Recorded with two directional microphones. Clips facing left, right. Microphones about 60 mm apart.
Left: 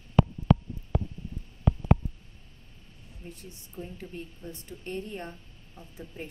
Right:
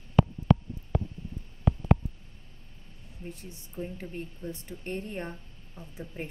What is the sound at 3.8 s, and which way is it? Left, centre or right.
Speech, right.